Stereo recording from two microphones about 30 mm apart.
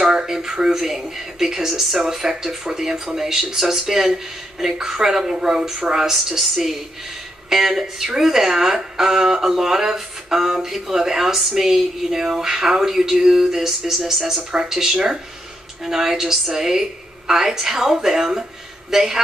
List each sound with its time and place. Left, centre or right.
0.0 s a sound: right
0.3 s speech: centre
14.2 s speech: right